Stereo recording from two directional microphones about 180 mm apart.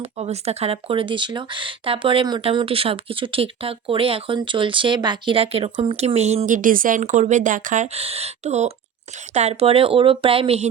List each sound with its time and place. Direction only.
0.0 s speech: 35° right (ahead or behind)